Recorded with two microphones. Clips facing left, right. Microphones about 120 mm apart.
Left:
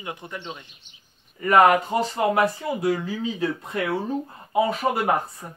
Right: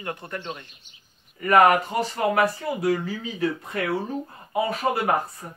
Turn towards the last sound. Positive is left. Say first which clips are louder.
# left 1 dB
turn(degrees=15)  # may be behind; listen again after turning